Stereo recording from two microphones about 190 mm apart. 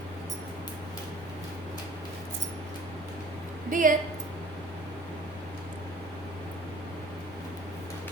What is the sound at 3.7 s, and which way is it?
Speech, 45° right (ahead or behind).